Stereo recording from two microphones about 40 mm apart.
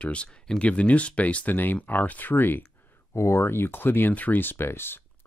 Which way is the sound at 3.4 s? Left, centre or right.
Left.